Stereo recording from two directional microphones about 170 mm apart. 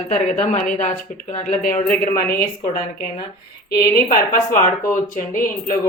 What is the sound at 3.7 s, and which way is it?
A woman's voice, 65° left (ahead or behind).